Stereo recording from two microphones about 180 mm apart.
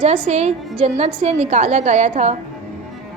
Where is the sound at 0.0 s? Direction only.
35° right (ahead or behind).